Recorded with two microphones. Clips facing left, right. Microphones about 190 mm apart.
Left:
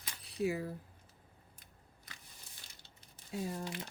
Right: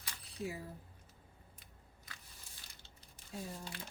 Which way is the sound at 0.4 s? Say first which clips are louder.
Left 8 dB; 70° left (ahead or behind).